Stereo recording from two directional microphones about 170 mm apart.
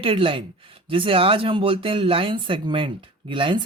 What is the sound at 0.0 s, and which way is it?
Speech, 30° right (ahead or behind).